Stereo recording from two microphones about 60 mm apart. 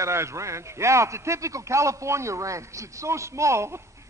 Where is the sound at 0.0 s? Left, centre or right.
Right.